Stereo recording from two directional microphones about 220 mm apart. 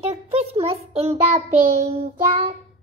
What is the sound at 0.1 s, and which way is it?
A child's voice, 30° right (ahead or behind).